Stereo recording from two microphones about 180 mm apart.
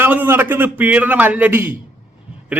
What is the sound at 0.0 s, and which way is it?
A man's voice, 10° right (ahead or behind).